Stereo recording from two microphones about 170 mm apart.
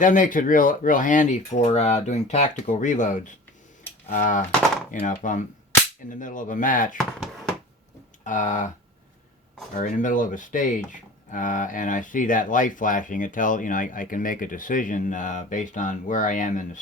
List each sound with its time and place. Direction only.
0.0 s speech: 50° left (ahead or behind)
6.9 s a sound: centre (ahead or behind)
8.2 s speech: 50° left (ahead or behind)
9.7 s speech: 50° left (ahead or behind)